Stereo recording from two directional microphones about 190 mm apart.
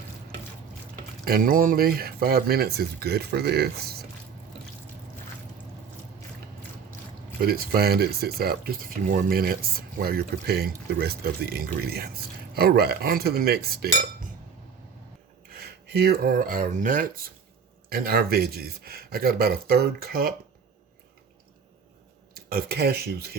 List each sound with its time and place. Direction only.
1.2 s speech: 50° right (ahead or behind)
7.4 s speech: 55° right (ahead or behind)
15.4 s speech: 55° right (ahead or behind)
22.4 s speech: 50° right (ahead or behind)